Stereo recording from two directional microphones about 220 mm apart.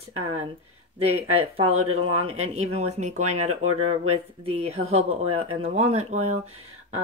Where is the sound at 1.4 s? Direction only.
25° right (ahead or behind).